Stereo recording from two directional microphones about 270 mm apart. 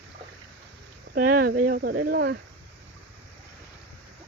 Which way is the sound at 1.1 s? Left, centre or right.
Right.